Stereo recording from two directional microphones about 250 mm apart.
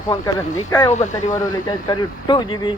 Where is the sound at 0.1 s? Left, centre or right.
Centre.